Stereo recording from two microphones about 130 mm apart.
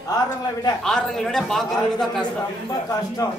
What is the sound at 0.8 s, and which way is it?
A woman's voice, 5° left (ahead or behind).